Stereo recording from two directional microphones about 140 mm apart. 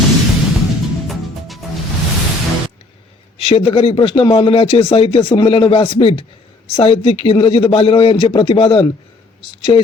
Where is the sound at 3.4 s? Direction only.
45° left (ahead or behind).